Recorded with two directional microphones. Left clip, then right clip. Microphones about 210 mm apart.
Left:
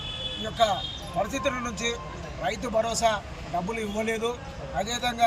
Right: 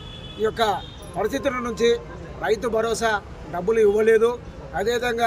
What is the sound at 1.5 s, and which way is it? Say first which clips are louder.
A man's voice: right 8 dB; 15° right (ahead or behind).